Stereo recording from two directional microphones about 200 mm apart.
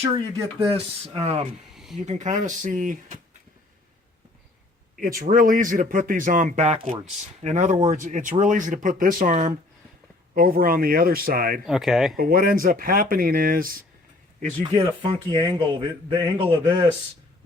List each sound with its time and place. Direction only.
0.0 s speech: 15° right (ahead or behind)
0.7 s speech: 30° right (ahead or behind)
1.7 s a sound: centre (ahead or behind)
2.0 s speech: 35° right (ahead or behind)
4.9 s speech: 45° right (ahead or behind)
11.6 s speech: centre (ahead or behind)
12.1 s speech: 45° right (ahead or behind)
14.6 s a man's voice: 25° right (ahead or behind)